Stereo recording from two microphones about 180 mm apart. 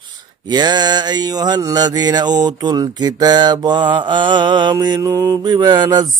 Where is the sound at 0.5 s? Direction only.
25° right (ahead or behind).